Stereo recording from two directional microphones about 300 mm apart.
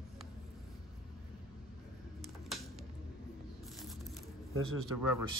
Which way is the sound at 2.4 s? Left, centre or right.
Centre.